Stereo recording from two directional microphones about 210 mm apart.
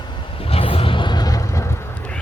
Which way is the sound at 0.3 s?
25° left (ahead or behind).